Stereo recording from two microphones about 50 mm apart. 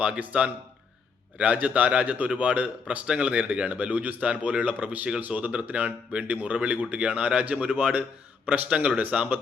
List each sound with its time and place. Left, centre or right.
0.0 s a man's voice: right
8.4 s a man's voice: right